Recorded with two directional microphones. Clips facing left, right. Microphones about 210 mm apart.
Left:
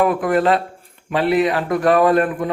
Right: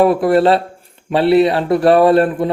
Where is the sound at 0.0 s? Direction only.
30° right (ahead or behind).